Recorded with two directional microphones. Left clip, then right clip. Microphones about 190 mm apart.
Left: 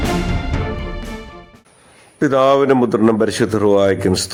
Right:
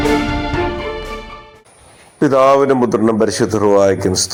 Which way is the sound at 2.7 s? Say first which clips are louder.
Even; 30° left (ahead or behind).